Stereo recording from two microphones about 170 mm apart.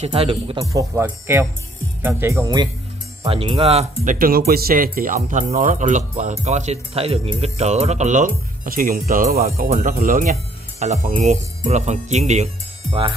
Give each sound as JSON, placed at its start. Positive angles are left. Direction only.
{"t": 0.0, "sound": "speech", "side_deg": -35}
{"t": 0.7, "sound": "speech", "side_deg": -15}
{"t": 3.3, "sound": "speech", "side_deg": -35}